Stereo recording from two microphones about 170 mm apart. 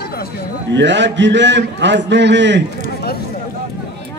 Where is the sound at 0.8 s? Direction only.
90° right.